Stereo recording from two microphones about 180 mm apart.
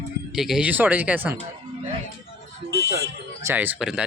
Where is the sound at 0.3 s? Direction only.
Centre (ahead or behind).